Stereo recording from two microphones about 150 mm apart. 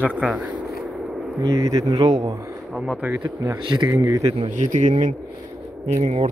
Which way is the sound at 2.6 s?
Centre (ahead or behind).